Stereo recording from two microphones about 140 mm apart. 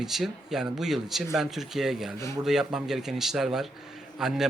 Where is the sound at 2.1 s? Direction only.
20° left (ahead or behind).